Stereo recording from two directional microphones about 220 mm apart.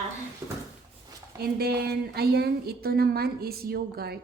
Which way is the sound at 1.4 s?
45° right (ahead or behind).